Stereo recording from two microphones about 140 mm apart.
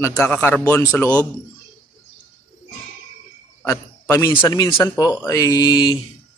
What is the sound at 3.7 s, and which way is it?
A man's voice, 20° left (ahead or behind).